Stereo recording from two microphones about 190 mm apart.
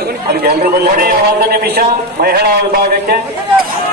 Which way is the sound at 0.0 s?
55° right (ahead or behind).